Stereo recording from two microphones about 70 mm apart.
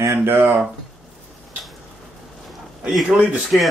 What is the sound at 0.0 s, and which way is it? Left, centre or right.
Speech, right.